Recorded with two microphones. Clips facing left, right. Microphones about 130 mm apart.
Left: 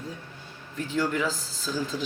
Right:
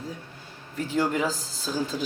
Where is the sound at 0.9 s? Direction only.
45° right (ahead or behind).